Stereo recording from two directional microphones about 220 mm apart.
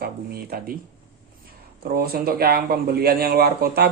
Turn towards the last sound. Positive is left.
turn(degrees=-45)  # may be behind; listen again after turning